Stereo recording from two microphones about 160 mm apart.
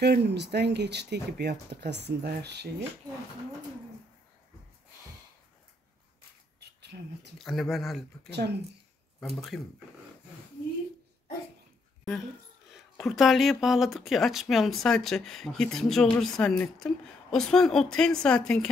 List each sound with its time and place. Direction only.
0.0 s speech: 90° right
6.6 s a sound: 90° right
7.3 s speech: centre (ahead or behind)
8.3 s speech: 90° right
9.2 s speech: centre (ahead or behind)
12.7 s speech: centre (ahead or behind)